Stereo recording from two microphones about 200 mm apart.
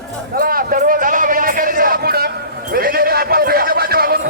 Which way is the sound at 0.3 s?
45° right (ahead or behind).